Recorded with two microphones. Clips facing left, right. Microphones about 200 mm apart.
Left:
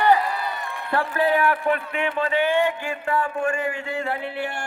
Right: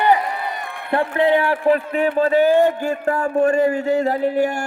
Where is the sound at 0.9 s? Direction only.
20° right (ahead or behind).